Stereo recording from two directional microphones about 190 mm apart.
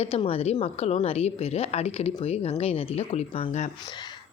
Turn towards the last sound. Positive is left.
turn(degrees=35)  # may be behind; listen again after turning